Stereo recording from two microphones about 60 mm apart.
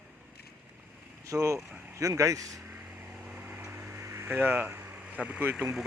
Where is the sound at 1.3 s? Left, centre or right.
Right.